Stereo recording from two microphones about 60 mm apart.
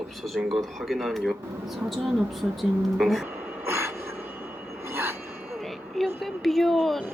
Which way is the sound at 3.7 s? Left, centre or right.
Right.